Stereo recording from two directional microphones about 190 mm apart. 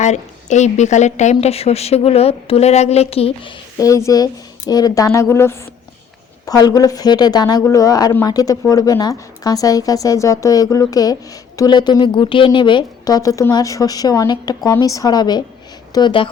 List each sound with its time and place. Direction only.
0.0 s a woman's voice: 40° left (ahead or behind)
3.8 s a woman's voice: 15° left (ahead or behind)